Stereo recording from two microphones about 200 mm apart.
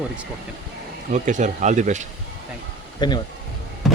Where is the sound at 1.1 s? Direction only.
40° right (ahead or behind).